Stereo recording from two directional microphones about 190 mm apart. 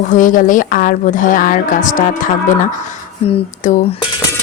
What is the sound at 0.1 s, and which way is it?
Speech, 45° left (ahead or behind).